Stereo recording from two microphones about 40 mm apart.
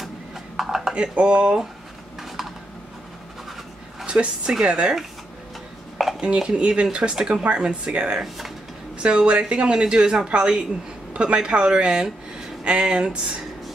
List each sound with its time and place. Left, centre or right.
0.6 s a sound: centre
0.9 s speech: right
4.0 s speech: right
6.2 s speech: right